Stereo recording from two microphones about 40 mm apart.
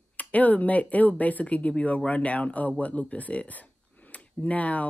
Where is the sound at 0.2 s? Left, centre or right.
Left.